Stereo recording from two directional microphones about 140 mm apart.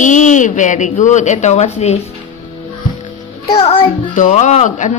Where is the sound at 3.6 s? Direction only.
40° left (ahead or behind).